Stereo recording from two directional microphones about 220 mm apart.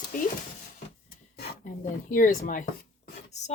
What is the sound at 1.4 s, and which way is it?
Speech, 35° left (ahead or behind).